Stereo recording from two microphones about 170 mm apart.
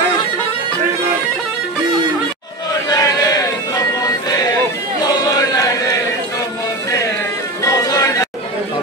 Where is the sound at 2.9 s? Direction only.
20° left (ahead or behind).